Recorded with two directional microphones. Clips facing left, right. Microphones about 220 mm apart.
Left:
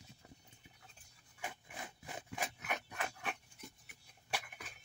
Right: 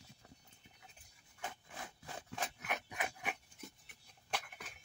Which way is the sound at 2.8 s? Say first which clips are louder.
Right 1 dB; 15° right (ahead or behind).